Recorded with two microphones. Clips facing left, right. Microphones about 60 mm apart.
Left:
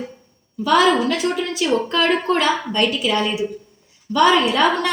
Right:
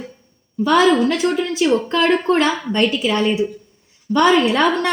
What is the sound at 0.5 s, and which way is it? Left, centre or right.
A woman's voice, right.